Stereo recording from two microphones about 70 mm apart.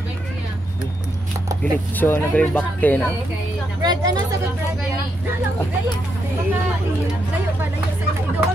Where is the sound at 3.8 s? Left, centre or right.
Right.